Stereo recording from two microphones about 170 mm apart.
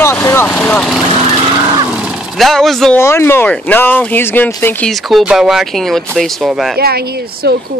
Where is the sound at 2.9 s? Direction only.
15° left (ahead or behind).